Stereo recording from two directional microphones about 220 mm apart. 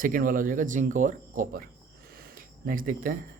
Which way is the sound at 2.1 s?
40° right (ahead or behind).